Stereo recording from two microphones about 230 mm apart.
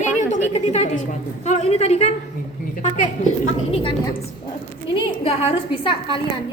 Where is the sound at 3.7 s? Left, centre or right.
Left.